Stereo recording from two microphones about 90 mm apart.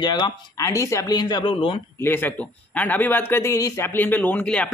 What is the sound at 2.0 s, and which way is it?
A man's voice, 20° left (ahead or behind).